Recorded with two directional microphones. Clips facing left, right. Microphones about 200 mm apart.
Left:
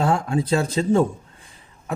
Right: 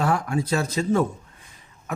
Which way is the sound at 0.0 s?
25° left (ahead or behind).